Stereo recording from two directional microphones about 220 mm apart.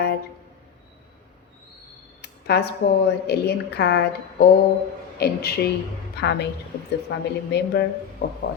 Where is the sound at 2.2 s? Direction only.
50° left (ahead or behind).